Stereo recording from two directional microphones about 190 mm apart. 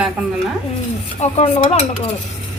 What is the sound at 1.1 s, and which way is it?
Dishes, 35° left (ahead or behind).